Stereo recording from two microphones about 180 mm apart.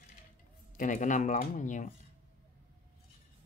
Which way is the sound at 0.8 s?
45° left (ahead or behind).